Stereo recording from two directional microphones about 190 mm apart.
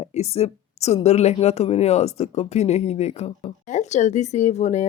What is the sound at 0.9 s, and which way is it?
Speech, 35° left (ahead or behind).